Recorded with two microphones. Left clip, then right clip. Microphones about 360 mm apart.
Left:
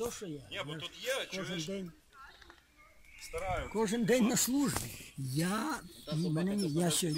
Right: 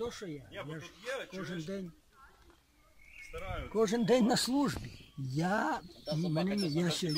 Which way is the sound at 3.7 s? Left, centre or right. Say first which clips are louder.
Right 3 dB; right.